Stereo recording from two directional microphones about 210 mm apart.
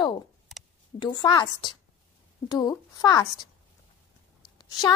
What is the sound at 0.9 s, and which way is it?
A child's voice, 20° left (ahead or behind).